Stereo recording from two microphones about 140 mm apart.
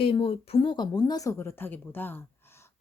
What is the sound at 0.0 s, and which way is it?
Speech, 40° left (ahead or behind).